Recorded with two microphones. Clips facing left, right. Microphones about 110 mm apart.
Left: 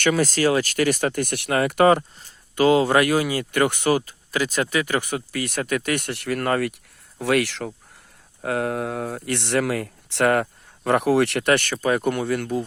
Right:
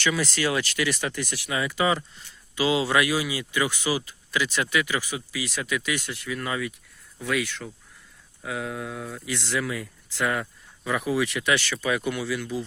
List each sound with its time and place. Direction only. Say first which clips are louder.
0.0 s speech: left 6 dB; 45° left (ahead or behind)
2.0 s speech: left 6 dB; 40° left (ahead or behind)
4.9 s speech: left 5 dB; 55° left (ahead or behind); by 7.7 s 80° left
8.4 s speech: left 8 dB; 65° left (ahead or behind)